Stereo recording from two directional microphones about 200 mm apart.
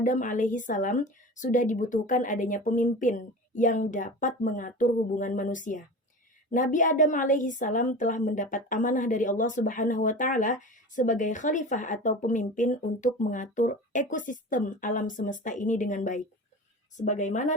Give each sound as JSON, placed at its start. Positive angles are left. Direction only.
{"t": 0.0, "sound": "a woman's voice", "side_deg": 40}